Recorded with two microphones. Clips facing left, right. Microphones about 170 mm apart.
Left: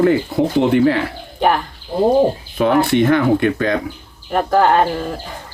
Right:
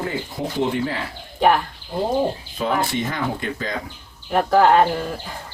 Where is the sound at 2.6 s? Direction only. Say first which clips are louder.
Left 9 dB; 65° left (ahead or behind).